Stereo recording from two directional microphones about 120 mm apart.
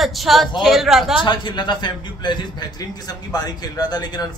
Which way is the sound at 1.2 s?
40° left (ahead or behind).